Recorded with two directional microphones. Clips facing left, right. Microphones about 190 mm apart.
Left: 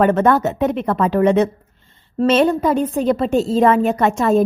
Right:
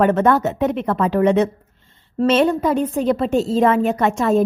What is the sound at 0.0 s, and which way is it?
A woman's voice, 50° left (ahead or behind).